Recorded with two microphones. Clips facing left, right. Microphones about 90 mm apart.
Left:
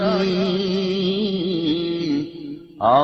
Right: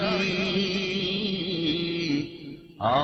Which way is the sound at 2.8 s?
35° left (ahead or behind).